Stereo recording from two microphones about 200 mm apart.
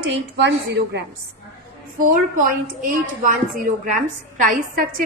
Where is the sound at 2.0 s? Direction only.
45° right (ahead or behind).